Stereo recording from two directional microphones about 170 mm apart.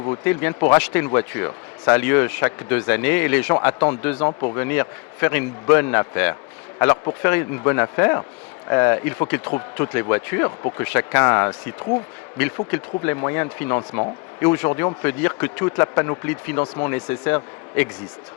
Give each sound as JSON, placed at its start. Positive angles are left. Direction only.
{"t": 0.1, "sound": "speech", "side_deg": 15}
{"t": 4.3, "sound": "speech", "side_deg": 30}
{"t": 4.5, "sound": "speech", "side_deg": 15}
{"t": 12.7, "sound": "speech", "side_deg": 15}